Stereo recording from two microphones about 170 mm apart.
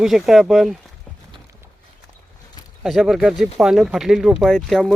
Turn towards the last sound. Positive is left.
turn(degrees=0)  # may be behind; listen again after turning